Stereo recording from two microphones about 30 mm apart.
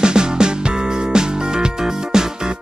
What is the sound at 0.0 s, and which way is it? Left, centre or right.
Music, right.